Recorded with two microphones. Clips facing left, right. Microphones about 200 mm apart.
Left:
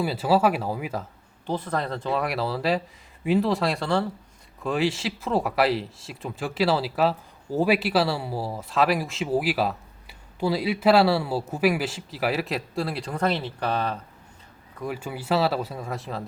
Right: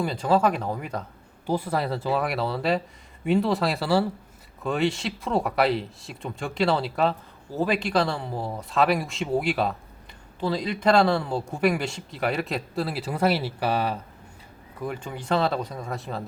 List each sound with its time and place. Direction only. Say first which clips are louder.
0.0 s speech: left 1 dB; 5° left (ahead or behind)
1.5 s a man's voice: right 2 dB; 10° right (ahead or behind)
14.8 s a man's voice: left 1 dB; 5° left (ahead or behind)